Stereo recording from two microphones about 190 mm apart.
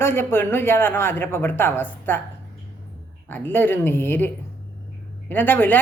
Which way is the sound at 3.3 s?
10° left (ahead or behind).